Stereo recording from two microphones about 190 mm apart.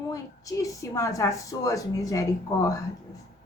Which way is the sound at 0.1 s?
15° left (ahead or behind).